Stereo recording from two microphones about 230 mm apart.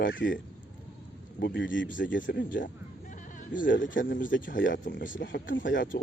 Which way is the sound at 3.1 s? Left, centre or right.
Left.